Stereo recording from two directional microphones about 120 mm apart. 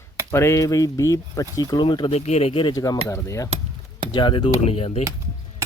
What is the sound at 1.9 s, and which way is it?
Keys jangling, 40° left (ahead or behind).